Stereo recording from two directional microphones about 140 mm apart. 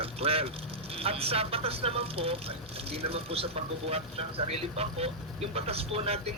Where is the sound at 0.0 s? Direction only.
45° right (ahead or behind).